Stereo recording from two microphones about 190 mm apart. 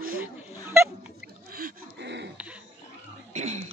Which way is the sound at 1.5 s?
55° right (ahead or behind).